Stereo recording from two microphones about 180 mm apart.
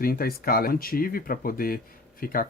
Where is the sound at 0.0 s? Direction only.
55° left (ahead or behind).